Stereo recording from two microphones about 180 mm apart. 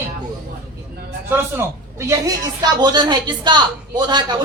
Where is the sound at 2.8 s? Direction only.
25° right (ahead or behind).